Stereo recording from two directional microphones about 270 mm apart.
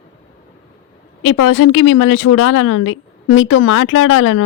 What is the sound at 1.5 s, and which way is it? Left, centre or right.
A woman's voice, left.